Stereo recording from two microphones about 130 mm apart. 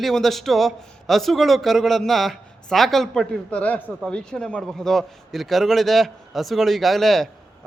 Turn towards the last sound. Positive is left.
turn(degrees=0)  # may be behind; listen again after turning